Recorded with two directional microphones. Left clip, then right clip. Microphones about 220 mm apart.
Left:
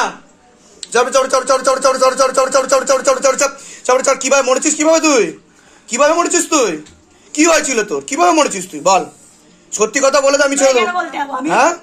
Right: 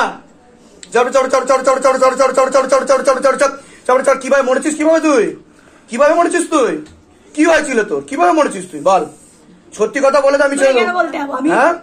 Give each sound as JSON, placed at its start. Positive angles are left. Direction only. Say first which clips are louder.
{"t": 0.7, "sound": "a sound", "louder": "even", "side_deg": 40}
{"t": 2.9, "sound": "a man's voice", "louder": "right 1 dB", "side_deg": 45}
{"t": 10.9, "sound": "a woman's voice", "louder": "right 2 dB", "side_deg": 0}
{"t": 11.4, "sound": "speech", "louder": "right 1 dB", "side_deg": 50}